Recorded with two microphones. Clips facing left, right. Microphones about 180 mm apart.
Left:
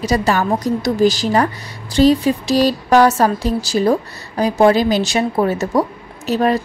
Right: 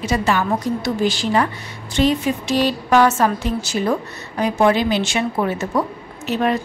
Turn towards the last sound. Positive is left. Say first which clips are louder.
# left 3 dB
turn(degrees=35)  # may be behind; listen again after turning